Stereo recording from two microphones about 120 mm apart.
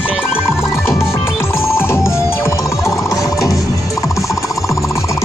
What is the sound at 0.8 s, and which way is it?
Music, 20° left (ahead or behind).